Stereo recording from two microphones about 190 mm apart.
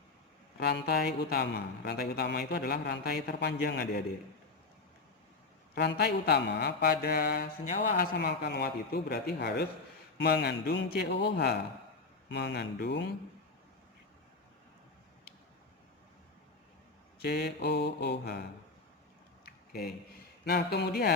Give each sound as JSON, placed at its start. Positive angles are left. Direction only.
{"t": 0.6, "sound": "speech", "side_deg": 60}
{"t": 5.7, "sound": "speech", "side_deg": 60}
{"t": 17.2, "sound": "speech", "side_deg": 60}
{"t": 20.4, "sound": "speech", "side_deg": 55}